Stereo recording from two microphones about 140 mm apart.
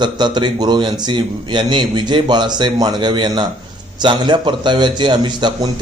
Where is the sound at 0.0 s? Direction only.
30° right (ahead or behind).